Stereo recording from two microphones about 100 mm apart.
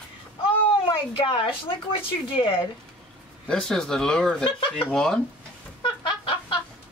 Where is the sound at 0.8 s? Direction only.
60° left (ahead or behind).